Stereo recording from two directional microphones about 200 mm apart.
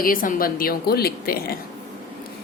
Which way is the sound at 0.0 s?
45° left (ahead or behind).